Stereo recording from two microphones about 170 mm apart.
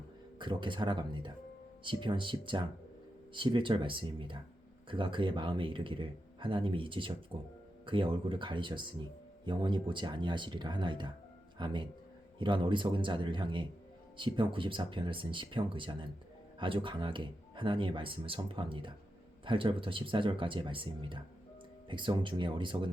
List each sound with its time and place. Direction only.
0.3 s speech: 30° right (ahead or behind)